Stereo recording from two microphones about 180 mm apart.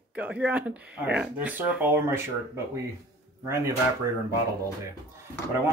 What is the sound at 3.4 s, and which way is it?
Speech, 15° right (ahead or behind).